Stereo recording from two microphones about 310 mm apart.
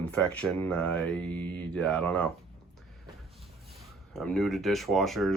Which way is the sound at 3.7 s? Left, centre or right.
Centre.